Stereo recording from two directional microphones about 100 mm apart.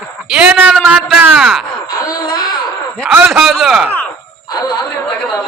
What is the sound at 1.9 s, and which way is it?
Wail, 40° left (ahead or behind).